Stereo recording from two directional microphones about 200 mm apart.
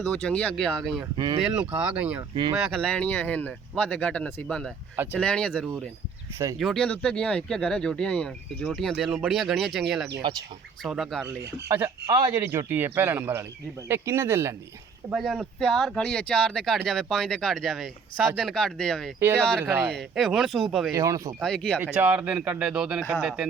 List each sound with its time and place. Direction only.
0.1 s speech: 5° left (ahead or behind)
1.1 s speech: 25° right (ahead or behind)
1.4 s speech: 5° right (ahead or behind)
2.3 s speech: 25° right (ahead or behind)
2.6 s speech: 5° left (ahead or behind)
11.3 s speech: 10° right (ahead or behind)
15.1 s speech: centre (ahead or behind)
19.2 s speech: 10° right (ahead or behind)
20.9 s speech: 15° right (ahead or behind)
21.4 s speech: 5° left (ahead or behind)
21.8 s speech: 10° right (ahead or behind)